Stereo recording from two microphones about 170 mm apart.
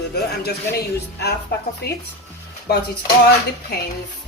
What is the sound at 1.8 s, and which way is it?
Speech, 70° left (ahead or behind).